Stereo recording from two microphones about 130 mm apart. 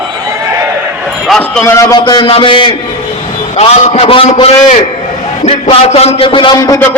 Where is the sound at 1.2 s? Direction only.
5° left (ahead or behind).